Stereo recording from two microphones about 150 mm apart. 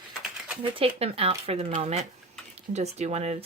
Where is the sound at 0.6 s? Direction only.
40° right (ahead or behind).